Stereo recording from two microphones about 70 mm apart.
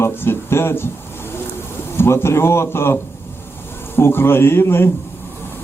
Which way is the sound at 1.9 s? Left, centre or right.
Left.